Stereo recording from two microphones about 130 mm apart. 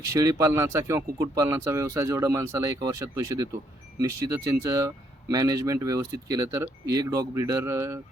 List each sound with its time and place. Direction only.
0.0 s speech: 25° right (ahead or behind)